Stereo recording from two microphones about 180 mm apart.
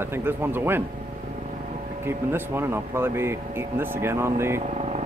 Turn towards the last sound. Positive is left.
turn(degrees=-40)  # may be behind; listen again after turning